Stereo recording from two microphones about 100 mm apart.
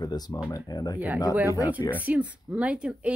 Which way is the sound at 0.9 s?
15° right (ahead or behind).